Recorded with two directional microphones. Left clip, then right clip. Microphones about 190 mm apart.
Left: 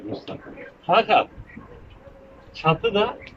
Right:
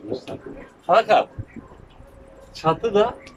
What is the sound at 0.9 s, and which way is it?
Speech, 20° right (ahead or behind).